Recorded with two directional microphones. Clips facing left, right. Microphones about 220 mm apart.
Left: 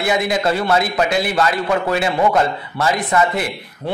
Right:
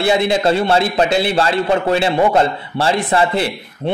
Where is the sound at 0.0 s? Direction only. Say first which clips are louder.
Right 3 dB; 30° right (ahead or behind).